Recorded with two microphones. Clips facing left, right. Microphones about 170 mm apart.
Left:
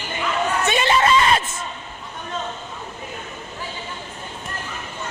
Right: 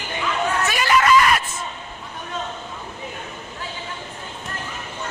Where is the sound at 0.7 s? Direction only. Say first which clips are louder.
Even; 25° left (ahead or behind).